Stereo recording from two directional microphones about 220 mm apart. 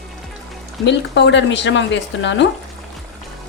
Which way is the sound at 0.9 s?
55° left (ahead or behind).